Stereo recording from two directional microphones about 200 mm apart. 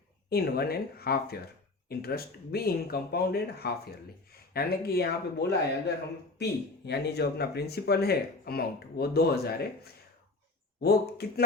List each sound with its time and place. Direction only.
0.3 s speech: 50° left (ahead or behind)